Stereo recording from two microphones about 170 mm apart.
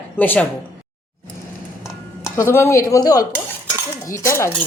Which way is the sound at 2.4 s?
15° left (ahead or behind).